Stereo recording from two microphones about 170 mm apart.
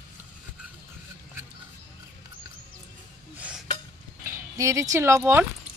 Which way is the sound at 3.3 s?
5° right (ahead or behind).